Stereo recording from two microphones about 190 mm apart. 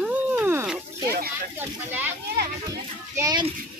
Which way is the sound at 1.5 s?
10° right (ahead or behind).